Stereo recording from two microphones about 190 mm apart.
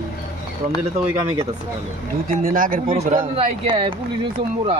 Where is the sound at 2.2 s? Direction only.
50° right (ahead or behind).